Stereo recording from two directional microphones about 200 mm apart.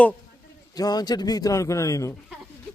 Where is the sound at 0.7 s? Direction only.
20° left (ahead or behind).